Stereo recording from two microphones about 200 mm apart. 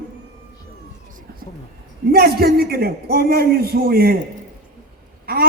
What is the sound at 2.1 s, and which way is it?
A man's voice, 50° right (ahead or behind).